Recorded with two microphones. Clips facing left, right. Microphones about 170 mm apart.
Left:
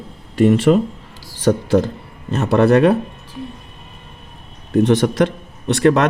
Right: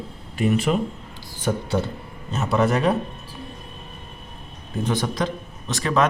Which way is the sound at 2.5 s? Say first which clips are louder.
Left 8 dB; 75° left (ahead or behind).